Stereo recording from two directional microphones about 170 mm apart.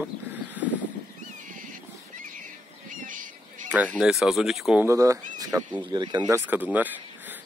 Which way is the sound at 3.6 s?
10° right (ahead or behind).